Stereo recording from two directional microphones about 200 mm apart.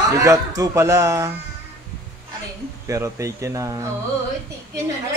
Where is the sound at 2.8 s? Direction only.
15° right (ahead or behind).